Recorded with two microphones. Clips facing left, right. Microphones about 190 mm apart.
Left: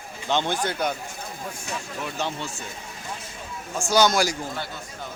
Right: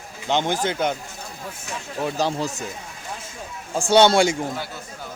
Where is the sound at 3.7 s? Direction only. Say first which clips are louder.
Right 5 dB; 30° right (ahead or behind).